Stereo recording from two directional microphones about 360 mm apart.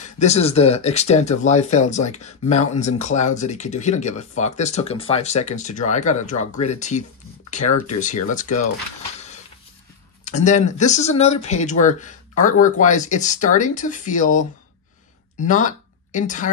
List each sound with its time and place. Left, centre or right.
0.2 s speech: centre
10.2 s speech: centre